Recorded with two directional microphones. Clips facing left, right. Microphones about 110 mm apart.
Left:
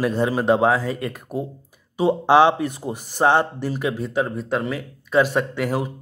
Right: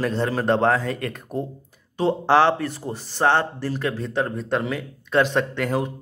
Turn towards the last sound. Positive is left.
turn(degrees=5)  # may be behind; listen again after turning